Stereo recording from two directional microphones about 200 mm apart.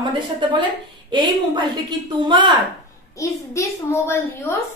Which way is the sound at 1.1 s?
25° right (ahead or behind).